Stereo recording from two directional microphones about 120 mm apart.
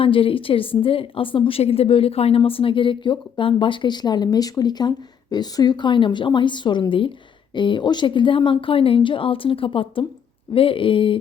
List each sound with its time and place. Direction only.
0.0 s a woman's voice: 50° left (ahead or behind)